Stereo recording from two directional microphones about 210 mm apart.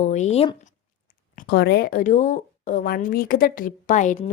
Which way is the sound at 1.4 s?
50° left (ahead or behind).